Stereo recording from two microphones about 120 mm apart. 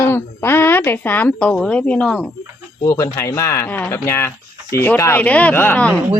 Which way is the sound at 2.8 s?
25° left (ahead or behind).